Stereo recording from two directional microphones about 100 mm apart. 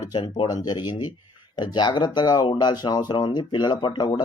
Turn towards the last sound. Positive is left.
turn(degrees=45)  # may be behind; listen again after turning